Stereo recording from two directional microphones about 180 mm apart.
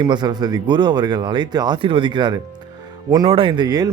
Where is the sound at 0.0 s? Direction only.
25° right (ahead or behind).